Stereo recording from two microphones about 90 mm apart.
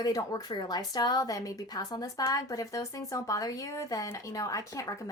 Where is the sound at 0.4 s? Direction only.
50° left (ahead or behind).